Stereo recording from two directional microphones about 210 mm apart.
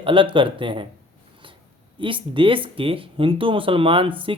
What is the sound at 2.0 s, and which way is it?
Speech, 25° right (ahead or behind).